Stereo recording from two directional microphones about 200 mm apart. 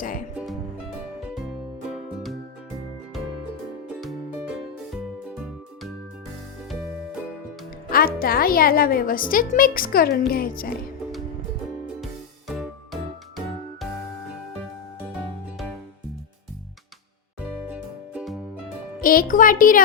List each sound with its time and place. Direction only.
4.4 s music: 5° right (ahead or behind)
7.9 s a woman's voice: 45° left (ahead or behind)
12.5 s music: centre (ahead or behind)
17.7 s music: 5° right (ahead or behind)
19.0 s a woman's voice: 45° left (ahead or behind)